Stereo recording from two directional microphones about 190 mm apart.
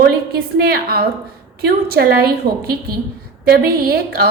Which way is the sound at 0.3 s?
55° right (ahead or behind).